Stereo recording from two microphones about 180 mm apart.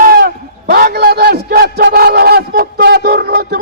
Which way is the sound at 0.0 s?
55° right (ahead or behind).